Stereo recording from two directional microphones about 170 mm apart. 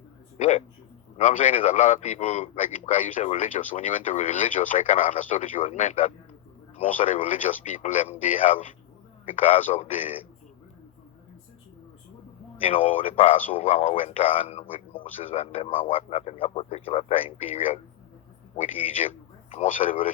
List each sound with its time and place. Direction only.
0.3 s a man's voice: 45° left (ahead or behind)
12.6 s a man's voice: 35° left (ahead or behind); by 20.1 s 50° left (ahead or behind)